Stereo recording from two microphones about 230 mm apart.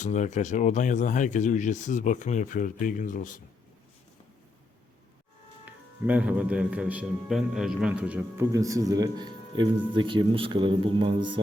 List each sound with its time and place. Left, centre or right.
0.0 s speech: left
5.6 s speech: centre; by 11.3 s right